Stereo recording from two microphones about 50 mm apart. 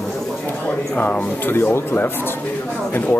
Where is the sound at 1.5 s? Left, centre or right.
Left.